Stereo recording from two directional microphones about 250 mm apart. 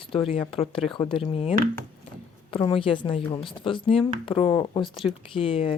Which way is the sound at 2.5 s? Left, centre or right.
Left.